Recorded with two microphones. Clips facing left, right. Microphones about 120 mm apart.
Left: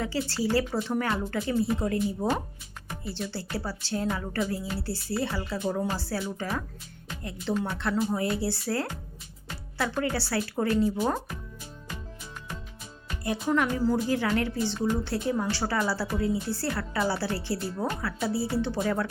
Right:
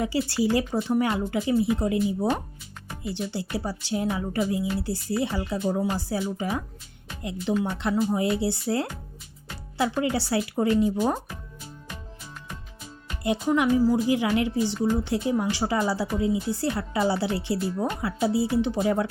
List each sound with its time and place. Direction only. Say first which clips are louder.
0.0 s a woman's voice: right 4 dB; 15° right (ahead or behind)
13.2 s a woman's voice: right 4 dB; 15° right (ahead or behind)